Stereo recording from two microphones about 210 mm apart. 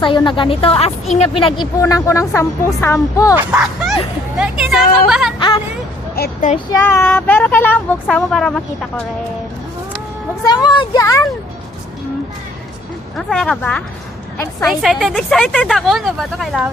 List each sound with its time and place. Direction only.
0.0 s a woman's voice: 25° left (ahead or behind)
3.3 s speech: 5° right (ahead or behind)
6.1 s speech: 50° left (ahead or behind)
6.8 s speech: 10° left (ahead or behind)
10.4 s a woman's voice: 20° left (ahead or behind)
13.1 s speech: 5° left (ahead or behind)